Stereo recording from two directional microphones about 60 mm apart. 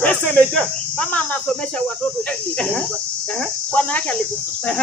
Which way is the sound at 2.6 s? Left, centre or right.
Centre.